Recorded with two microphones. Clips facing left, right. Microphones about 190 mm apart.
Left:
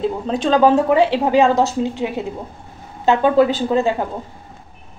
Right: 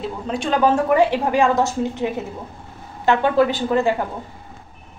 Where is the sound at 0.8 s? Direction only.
20° left (ahead or behind).